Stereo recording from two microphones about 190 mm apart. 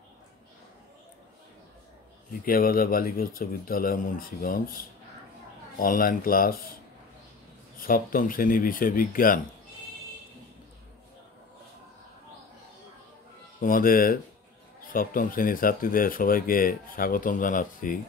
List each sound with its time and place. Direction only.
2.4 s speech: 50° left (ahead or behind)
7.8 s speech: 50° left (ahead or behind)
13.6 s speech: 45° left (ahead or behind)